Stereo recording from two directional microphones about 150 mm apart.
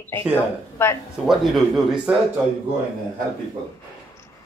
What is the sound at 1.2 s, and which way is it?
Speech, centre (ahead or behind).